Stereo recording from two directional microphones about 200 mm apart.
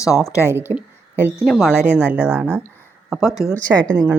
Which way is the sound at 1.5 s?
Centre (ahead or behind).